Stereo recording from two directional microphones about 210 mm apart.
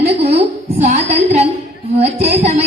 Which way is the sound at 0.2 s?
30° right (ahead or behind).